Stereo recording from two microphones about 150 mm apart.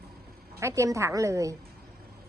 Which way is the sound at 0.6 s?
20° right (ahead or behind).